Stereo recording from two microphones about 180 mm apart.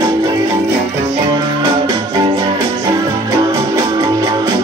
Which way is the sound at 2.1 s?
20° right (ahead or behind).